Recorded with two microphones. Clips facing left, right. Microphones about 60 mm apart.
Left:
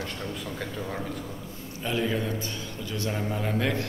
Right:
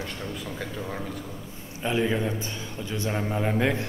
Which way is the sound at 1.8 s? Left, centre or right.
Centre.